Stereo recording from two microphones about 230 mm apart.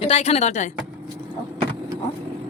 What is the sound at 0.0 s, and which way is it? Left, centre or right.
Speech, left.